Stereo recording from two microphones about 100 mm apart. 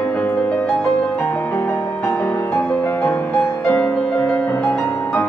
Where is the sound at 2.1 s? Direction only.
20° left (ahead or behind).